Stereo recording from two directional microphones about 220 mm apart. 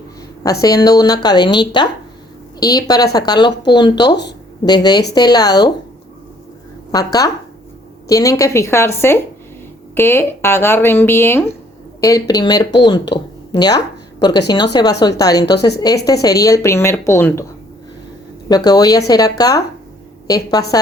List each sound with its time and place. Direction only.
0.6 s speech: 15° left (ahead or behind)
6.9 s a woman's voice: 15° left (ahead or behind)
18.4 s speech: 15° left (ahead or behind)